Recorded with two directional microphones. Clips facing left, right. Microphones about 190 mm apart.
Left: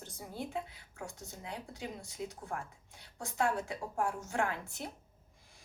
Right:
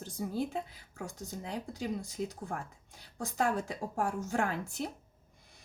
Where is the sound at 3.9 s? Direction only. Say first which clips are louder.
Right 2 dB; 35° right (ahead or behind).